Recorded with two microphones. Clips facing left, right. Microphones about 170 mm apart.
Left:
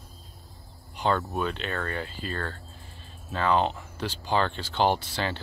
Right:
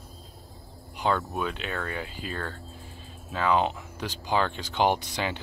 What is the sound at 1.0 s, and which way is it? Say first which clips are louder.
Speech: left 1 dB; 5° right (ahead or behind).